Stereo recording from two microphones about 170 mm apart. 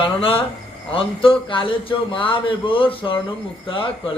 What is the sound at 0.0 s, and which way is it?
A man's voice, 35° left (ahead or behind).